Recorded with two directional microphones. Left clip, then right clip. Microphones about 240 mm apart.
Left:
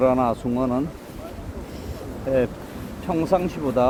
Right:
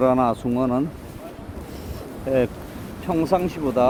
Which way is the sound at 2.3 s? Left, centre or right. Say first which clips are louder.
Right 1 dB; right.